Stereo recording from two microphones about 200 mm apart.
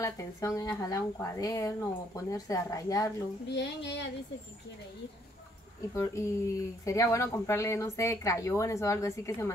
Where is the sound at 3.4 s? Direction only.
60° left (ahead or behind).